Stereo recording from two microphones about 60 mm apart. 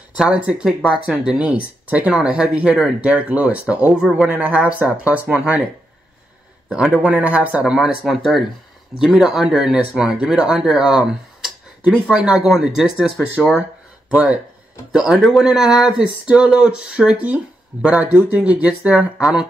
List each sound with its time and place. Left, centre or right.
0.1 s speech: right
1.4 s speech: right
7.0 s speech: right
7.7 s speech: centre
14.9 s speech: centre